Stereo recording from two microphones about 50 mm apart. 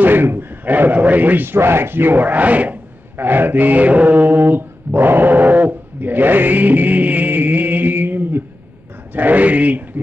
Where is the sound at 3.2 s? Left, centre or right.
Right.